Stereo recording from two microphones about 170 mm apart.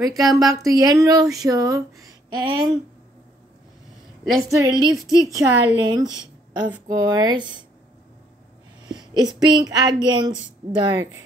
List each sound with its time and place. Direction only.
0.2 s a woman's voice: 20° right (ahead or behind)
4.4 s a woman's voice: 20° right (ahead or behind)
4.9 s a woman's voice: centre (ahead or behind)
5.3 s a woman's voice: 20° right (ahead or behind)
8.8 s speech: 25° right (ahead or behind)